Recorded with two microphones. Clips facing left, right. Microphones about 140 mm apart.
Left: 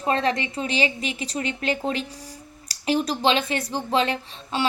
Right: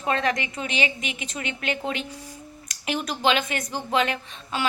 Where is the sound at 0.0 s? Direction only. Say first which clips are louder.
Left 2 dB; 30° left (ahead or behind).